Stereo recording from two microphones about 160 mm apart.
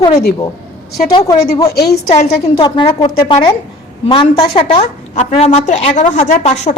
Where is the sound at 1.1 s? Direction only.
20° left (ahead or behind).